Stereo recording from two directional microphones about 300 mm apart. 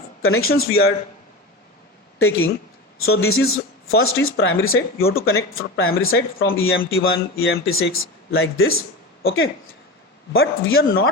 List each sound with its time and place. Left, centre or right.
0.2 s speech: left
2.1 s speech: left
4.9 s speech: left
6.1 s speech: left